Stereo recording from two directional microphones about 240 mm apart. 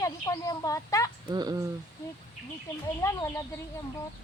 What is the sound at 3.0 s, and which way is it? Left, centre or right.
Speech, centre.